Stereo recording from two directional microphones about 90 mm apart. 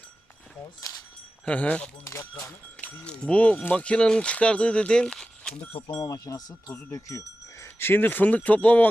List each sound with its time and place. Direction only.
0.8 s a sound: 40° left (ahead or behind)
1.5 s speech: 15° left (ahead or behind)
2.0 s speech: 30° left (ahead or behind)
3.0 s speech: 15° left (ahead or behind)
5.9 s speech: 45° left (ahead or behind); by 8.9 s 15° left (ahead or behind)